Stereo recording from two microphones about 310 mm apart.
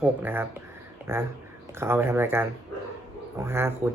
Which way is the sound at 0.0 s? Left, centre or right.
Centre.